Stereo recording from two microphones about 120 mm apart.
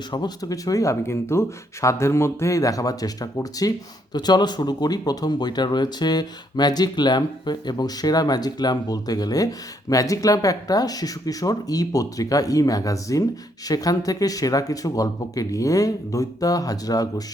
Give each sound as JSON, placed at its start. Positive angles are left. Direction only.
{"t": 0.1, "sound": "speech", "side_deg": 35}